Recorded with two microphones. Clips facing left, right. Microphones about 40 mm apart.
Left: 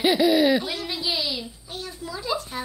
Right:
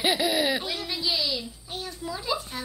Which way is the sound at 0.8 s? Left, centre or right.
Centre.